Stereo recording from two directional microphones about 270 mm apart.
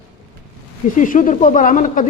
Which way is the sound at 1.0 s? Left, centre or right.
Left.